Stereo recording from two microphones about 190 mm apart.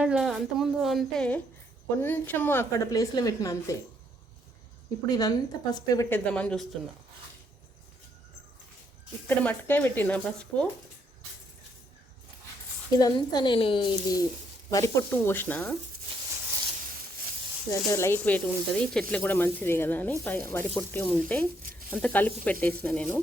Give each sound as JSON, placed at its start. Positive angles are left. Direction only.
{"t": 0.0, "sound": "a woman's voice", "side_deg": -5}
{"t": 5.0, "sound": "a woman's voice", "side_deg": 20}
{"t": 9.2, "sound": "a woman's voice", "side_deg": 10}
{"t": 13.0, "sound": "a woman's voice", "side_deg": 20}
{"t": 17.7, "sound": "a woman's voice", "side_deg": 15}
{"t": 21.6, "sound": "a sound", "side_deg": -45}
{"t": 21.8, "sound": "a woman's voice", "side_deg": 10}